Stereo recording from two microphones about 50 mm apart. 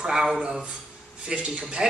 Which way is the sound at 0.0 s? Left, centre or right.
Centre.